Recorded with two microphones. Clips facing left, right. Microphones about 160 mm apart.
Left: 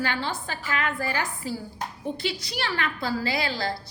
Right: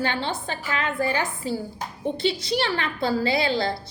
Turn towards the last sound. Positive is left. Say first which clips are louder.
# right 5 dB
turn(degrees=-25)  # may be behind; listen again after turning